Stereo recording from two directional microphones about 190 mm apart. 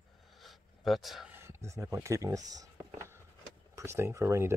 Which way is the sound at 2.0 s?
15° right (ahead or behind).